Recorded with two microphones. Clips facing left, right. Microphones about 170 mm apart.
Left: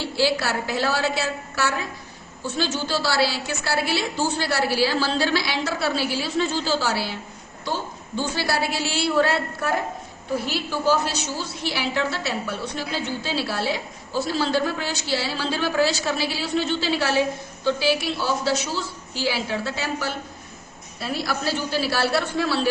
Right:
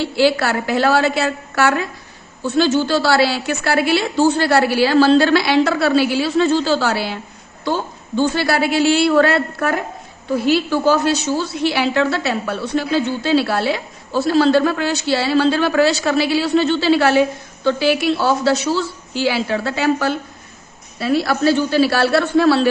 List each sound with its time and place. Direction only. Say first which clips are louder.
0.2 s a woman's voice: right 6 dB; 60° right (ahead or behind)